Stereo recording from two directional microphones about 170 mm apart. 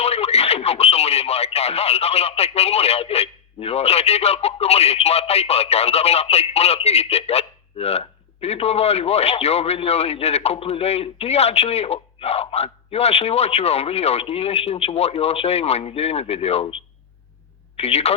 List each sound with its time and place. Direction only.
0.0 s speech: 40° left (ahead or behind)